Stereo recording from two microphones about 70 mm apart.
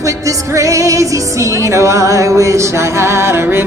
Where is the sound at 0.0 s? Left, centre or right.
Right.